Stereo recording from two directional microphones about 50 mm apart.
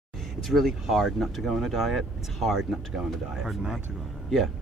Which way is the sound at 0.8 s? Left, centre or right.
Centre.